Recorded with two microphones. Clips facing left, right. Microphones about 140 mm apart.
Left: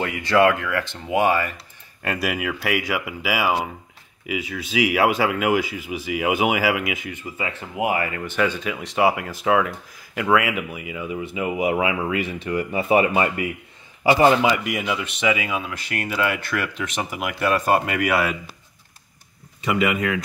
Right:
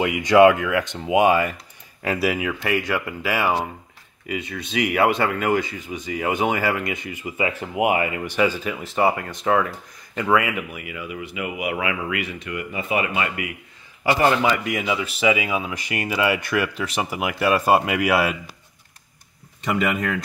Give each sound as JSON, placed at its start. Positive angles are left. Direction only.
{"t": 0.0, "sound": "speech", "side_deg": -15}
{"t": 2.0, "sound": "speech", "side_deg": 0}
{"t": 7.2, "sound": "speech", "side_deg": -20}
{"t": 8.4, "sound": "speech", "side_deg": -5}
{"t": 10.5, "sound": "speech", "side_deg": 20}
{"t": 14.0, "sound": "a man's voice", "side_deg": 20}
{"t": 14.7, "sound": "speech", "side_deg": 0}
{"t": 19.6, "sound": "speech", "side_deg": 0}